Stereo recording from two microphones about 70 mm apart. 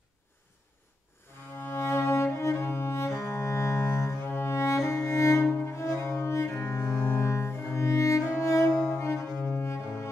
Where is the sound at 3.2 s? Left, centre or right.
Left.